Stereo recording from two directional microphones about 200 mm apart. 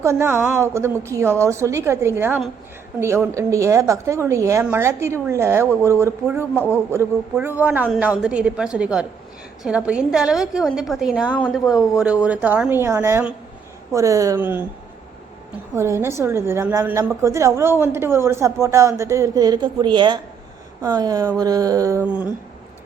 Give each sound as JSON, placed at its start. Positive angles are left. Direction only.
{"t": 0.0, "sound": "a woman's voice", "side_deg": -15}
{"t": 15.7, "sound": "a woman's voice", "side_deg": -15}